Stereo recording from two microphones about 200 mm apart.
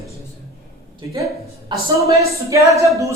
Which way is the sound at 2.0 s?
15° right (ahead or behind).